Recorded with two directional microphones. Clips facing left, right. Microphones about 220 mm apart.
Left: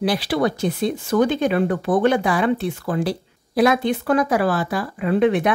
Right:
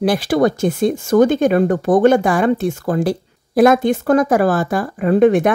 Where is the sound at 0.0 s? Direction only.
50° right (ahead or behind).